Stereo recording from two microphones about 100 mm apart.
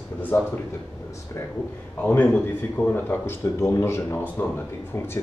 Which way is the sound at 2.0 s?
15° left (ahead or behind).